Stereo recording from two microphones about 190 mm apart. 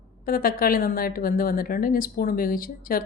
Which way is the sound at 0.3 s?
50° left (ahead or behind).